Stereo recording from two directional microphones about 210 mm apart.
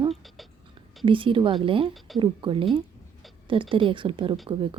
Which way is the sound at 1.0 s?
25° right (ahead or behind).